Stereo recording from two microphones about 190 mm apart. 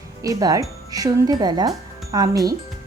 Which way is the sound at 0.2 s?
20° right (ahead or behind).